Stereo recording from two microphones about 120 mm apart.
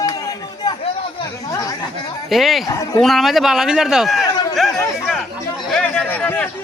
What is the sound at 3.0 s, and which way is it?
A man's voice, centre (ahead or behind).